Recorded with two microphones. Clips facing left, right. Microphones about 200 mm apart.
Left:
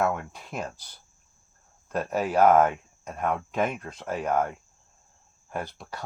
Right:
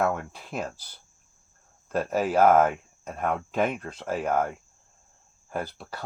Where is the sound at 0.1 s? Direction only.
30° right (ahead or behind).